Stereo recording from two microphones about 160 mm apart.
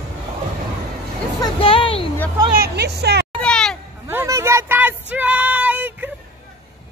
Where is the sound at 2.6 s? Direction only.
90° right.